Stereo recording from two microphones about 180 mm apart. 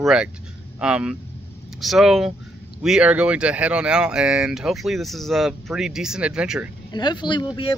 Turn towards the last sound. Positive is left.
turn(degrees=25)  # may be behind; listen again after turning